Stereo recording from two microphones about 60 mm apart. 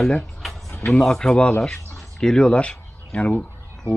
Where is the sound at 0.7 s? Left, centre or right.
Left.